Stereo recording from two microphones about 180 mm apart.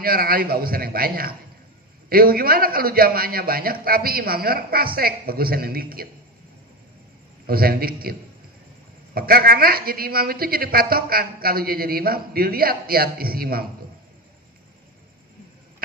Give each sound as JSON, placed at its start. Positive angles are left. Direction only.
{"t": 0.0, "sound": "a woman's voice", "side_deg": -55}
{"t": 7.4, "sound": "a woman's voice", "side_deg": -55}